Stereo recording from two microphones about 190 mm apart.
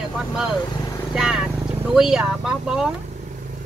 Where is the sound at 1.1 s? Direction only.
5° right (ahead or behind).